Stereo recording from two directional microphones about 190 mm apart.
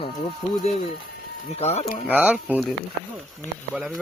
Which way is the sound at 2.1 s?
10° right (ahead or behind).